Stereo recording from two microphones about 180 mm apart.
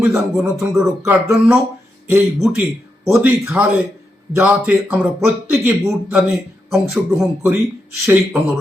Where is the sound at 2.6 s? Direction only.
15° right (ahead or behind).